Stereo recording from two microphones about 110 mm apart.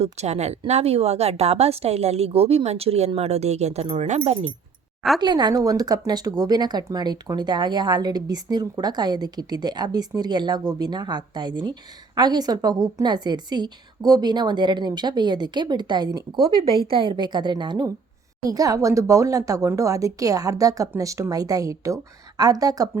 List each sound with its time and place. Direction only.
0.0 s a woman's voice: 85° right
0.7 s a woman's voice: 70° right (ahead or behind)
5.2 s a woman's voice: 40° right (ahead or behind)